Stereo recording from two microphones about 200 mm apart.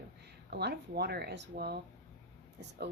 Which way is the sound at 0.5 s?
55° right (ahead or behind).